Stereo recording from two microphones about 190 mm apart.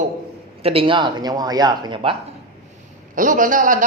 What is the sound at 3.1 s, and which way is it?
Speech, 45° right (ahead or behind).